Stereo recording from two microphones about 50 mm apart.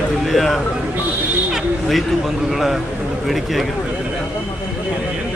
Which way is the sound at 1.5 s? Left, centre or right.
Centre.